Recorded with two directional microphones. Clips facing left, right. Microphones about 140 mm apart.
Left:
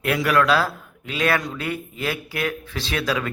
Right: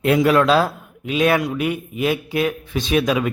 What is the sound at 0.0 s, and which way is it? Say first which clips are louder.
A man's voice: right 5 dB; 20° right (ahead or behind).